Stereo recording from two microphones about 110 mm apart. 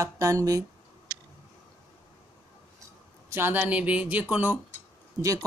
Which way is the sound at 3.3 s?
20° right (ahead or behind).